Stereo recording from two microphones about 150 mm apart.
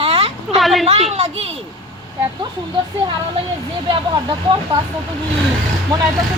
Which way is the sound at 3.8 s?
30° right (ahead or behind).